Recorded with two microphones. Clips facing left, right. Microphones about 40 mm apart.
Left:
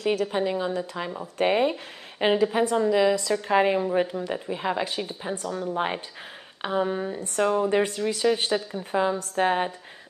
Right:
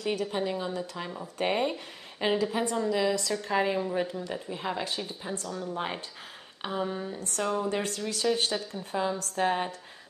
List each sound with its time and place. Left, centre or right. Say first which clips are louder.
0.0 s a woman's voice: left 6 dB; centre
0.3 s speech: left 5 dB; centre
3.4 s speech: left 6 dB; left
5.8 s speech: left 6 dB; left